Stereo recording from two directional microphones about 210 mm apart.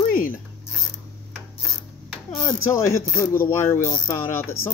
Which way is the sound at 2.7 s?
15° left (ahead or behind).